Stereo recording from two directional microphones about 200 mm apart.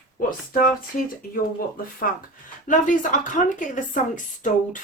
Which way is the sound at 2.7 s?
40° left (ahead or behind).